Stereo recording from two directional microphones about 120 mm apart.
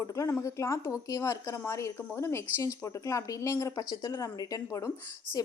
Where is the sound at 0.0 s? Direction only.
25° left (ahead or behind).